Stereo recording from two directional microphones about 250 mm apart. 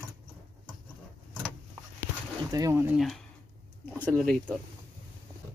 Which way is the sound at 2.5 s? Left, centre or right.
Centre.